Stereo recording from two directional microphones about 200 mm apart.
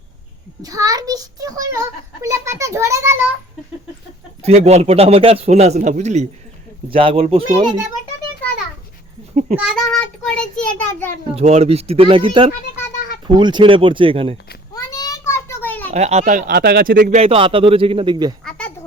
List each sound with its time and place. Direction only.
0.6 s a child's voice: 15° right (ahead or behind)
4.4 s a man's voice: 35° right (ahead or behind)
9.6 s a child's voice: 5° right (ahead or behind)
10.2 s a child's voice: 5° left (ahead or behind)
11.3 s a man's voice: 30° right (ahead or behind)
14.7 s a sound: 20° left (ahead or behind)
15.9 s speech: 35° right (ahead or behind)
17.2 s a man's voice: 30° right (ahead or behind)
18.4 s a sound: 5° left (ahead or behind)